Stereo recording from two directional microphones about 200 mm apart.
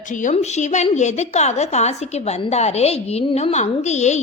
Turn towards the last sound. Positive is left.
turn(degrees=35)  # may be behind; listen again after turning